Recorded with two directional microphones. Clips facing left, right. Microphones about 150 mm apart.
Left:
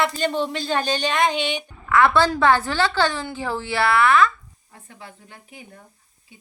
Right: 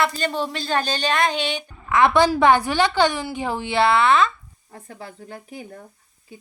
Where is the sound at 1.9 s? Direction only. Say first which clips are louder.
Right 1 dB; 15° right (ahead or behind).